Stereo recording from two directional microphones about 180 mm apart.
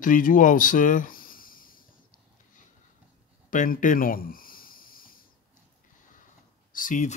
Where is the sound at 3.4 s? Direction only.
50° left (ahead or behind).